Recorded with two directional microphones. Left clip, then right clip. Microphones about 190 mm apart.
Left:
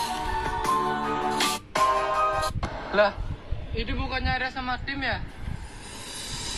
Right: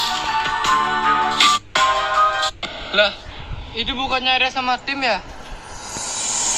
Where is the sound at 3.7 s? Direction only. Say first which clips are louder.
Right 10 dB; 45° right (ahead or behind).